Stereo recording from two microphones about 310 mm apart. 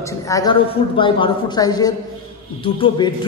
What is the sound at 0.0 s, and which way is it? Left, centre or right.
A man's voice, centre.